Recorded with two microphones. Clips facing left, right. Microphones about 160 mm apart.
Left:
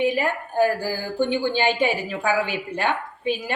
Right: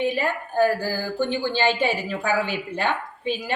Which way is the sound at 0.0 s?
15° left (ahead or behind).